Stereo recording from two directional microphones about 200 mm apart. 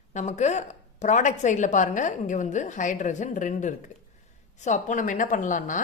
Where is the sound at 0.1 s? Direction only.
35° left (ahead or behind).